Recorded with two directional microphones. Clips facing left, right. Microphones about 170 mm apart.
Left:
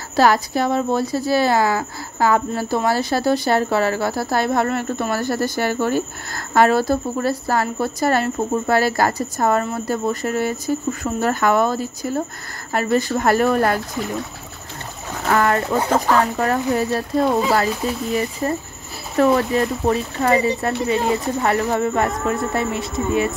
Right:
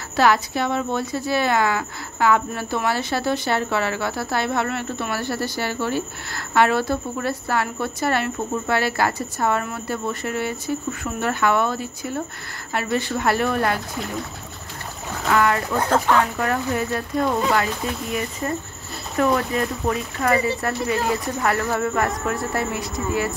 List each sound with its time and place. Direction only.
0.1 s speech: 40° left (ahead or behind)
15.2 s speech: 45° left (ahead or behind)
18.4 s speech: 30° left (ahead or behind)